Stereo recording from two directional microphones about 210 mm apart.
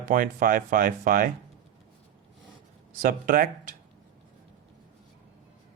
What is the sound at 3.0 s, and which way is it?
Speech, 40° right (ahead or behind).